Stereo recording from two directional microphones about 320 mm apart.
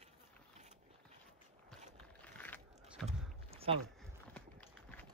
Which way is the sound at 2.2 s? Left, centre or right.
Centre.